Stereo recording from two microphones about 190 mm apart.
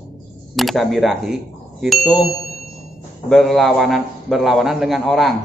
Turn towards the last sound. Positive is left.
turn(degrees=0)  # may be behind; listen again after turning